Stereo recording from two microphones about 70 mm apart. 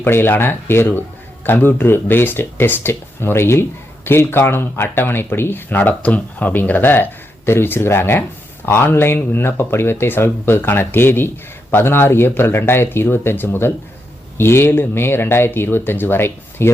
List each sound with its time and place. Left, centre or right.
0.0 s speech: left